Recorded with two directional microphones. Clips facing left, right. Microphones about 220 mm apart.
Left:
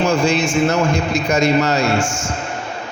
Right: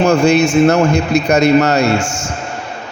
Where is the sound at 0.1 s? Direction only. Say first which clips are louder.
Right 6 dB; 65° right (ahead or behind).